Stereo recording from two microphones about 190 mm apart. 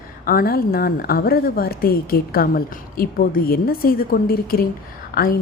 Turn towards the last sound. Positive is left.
turn(degrees=50)  # may be behind; listen again after turning